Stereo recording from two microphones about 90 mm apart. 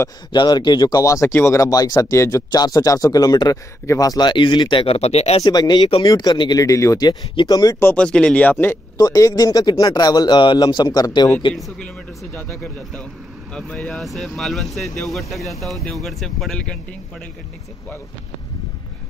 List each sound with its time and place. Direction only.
0.3 s a man's voice: 55° left (ahead or behind)
1.0 s speech: 35° left (ahead or behind); by 5.0 s 80° left
5.4 s a man's voice: 50° left (ahead or behind)
6.6 s speech: 35° left (ahead or behind)
7.1 s a man's voice: 50° left (ahead or behind)
7.8 s speech: 10° left (ahead or behind)
8.9 s a man's voice: 45° left (ahead or behind)
13.5 s speech: 10° left (ahead or behind)